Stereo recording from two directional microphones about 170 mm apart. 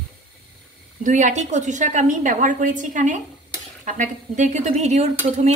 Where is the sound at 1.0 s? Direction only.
50° right (ahead or behind).